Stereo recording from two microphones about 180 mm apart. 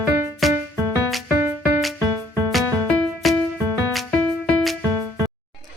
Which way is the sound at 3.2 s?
Centre (ahead or behind).